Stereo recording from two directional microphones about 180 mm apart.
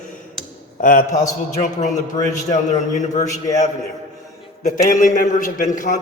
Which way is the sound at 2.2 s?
20° left (ahead or behind).